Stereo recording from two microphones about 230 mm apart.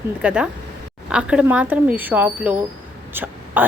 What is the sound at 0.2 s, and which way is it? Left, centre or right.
A woman's voice, centre.